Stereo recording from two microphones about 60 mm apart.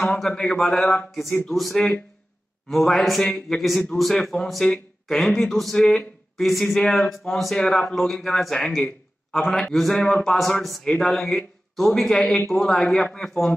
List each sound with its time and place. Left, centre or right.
0.0 s a man's voice: centre
1.4 s a man's voice: centre